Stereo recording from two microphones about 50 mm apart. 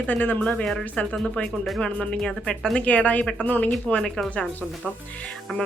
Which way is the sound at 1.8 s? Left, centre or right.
Centre.